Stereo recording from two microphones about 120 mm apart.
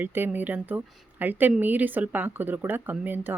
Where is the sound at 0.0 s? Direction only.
15° right (ahead or behind).